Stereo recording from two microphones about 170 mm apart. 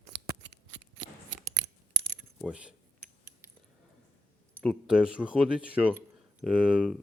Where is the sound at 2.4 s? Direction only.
5° right (ahead or behind).